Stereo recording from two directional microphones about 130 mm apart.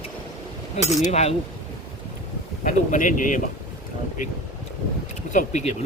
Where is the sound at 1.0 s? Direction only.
55° left (ahead or behind).